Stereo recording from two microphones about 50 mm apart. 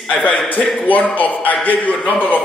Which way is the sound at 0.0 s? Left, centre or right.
Left.